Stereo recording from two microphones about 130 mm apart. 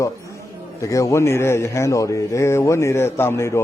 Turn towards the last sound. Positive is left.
turn(degrees=20)  # may be behind; listen again after turning